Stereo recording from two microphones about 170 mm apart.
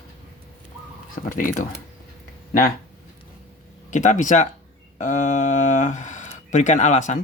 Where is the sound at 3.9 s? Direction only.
45° left (ahead or behind).